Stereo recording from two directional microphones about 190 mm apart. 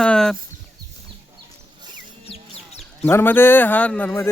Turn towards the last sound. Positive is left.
turn(degrees=10)  # may be behind; listen again after turning